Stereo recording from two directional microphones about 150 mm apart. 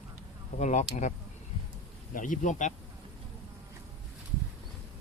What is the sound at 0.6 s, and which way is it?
Speech, 50° left (ahead or behind).